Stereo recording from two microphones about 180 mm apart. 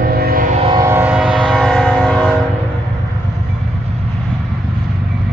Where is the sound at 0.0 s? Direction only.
55° right (ahead or behind).